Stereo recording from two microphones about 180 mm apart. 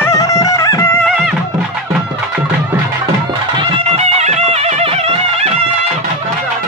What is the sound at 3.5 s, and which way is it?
Music, 35° right (ahead or behind).